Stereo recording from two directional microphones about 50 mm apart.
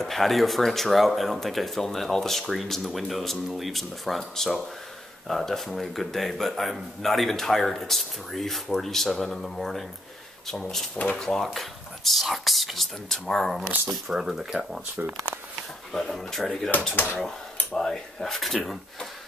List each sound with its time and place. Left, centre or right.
0.0 s a man's voice: centre
14.1 s speech: centre
15.0 s speech: right
15.9 s speech: centre
17.7 s a man's voice: centre